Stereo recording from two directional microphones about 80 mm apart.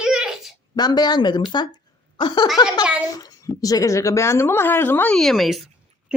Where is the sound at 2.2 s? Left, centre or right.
Left.